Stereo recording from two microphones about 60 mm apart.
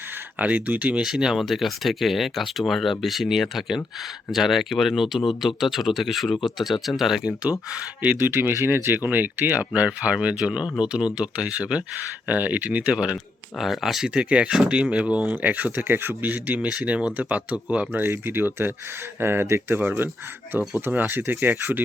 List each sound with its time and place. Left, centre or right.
0.3 s speech: right
1.0 s speech: centre
8.2 s speech: right; by 13.1 s centre
13.6 s speech: centre
14.1 s speech: centre
15.3 s speech: right
16.6 s speech: centre
17.9 s speech: right